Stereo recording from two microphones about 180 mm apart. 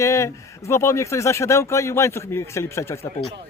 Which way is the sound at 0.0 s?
15° left (ahead or behind).